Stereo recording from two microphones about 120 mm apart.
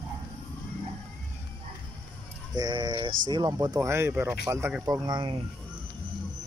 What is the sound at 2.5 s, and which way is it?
Speech, 35° right (ahead or behind).